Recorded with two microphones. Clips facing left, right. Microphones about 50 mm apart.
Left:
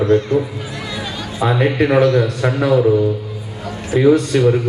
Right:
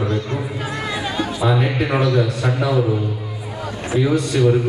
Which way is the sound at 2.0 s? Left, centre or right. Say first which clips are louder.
Left 4 dB; left.